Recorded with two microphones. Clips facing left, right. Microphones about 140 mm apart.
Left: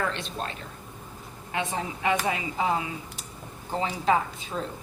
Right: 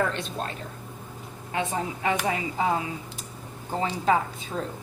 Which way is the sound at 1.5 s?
40° right (ahead or behind).